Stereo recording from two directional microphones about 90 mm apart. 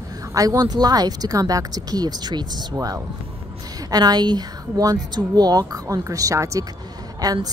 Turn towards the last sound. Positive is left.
turn(degrees=-45)  # may be behind; listen again after turning